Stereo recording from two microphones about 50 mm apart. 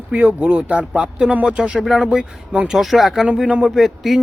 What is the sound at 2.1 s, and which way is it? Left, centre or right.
Speech, right.